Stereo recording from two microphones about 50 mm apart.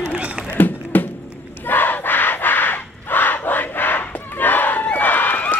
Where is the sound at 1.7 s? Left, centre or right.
Left.